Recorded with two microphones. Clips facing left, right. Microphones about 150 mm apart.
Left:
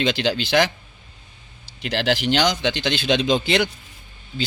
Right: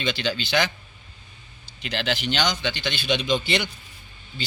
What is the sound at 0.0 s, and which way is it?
Speech, 85° left.